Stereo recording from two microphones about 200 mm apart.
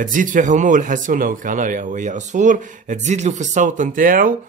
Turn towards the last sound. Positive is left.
turn(degrees=-45)  # may be behind; listen again after turning